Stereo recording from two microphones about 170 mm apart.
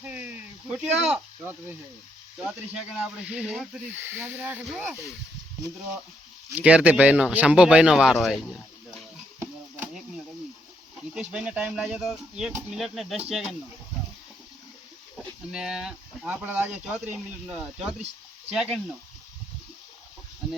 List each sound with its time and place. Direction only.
0.0 s a sound: 10° right (ahead or behind)
2.4 s speech: 5° right (ahead or behind)
6.6 s speech: 5° right (ahead or behind)
11.1 s speech: 5° right (ahead or behind)
15.5 s speech: 5° right (ahead or behind)